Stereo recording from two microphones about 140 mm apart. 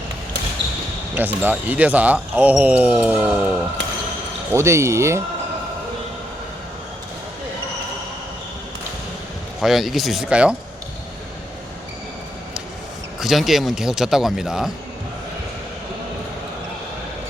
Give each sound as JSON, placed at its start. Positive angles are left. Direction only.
{"t": 1.1, "sound": "speech", "side_deg": -10}
{"t": 4.5, "sound": "speech", "side_deg": -20}
{"t": 9.6, "sound": "speech", "side_deg": 0}
{"t": 13.1, "sound": "speech", "side_deg": 0}